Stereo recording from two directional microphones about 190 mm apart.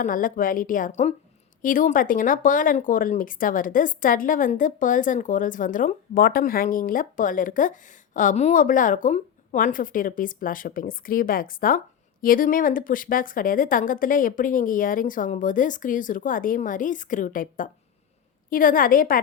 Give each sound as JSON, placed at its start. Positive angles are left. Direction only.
{"t": 0.0, "sound": "speech", "side_deg": 45}